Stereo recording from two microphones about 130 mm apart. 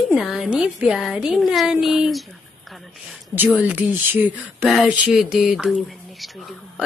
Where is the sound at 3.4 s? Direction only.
10° right (ahead or behind).